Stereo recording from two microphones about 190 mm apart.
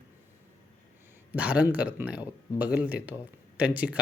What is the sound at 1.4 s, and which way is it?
Speech, 5° right (ahead or behind).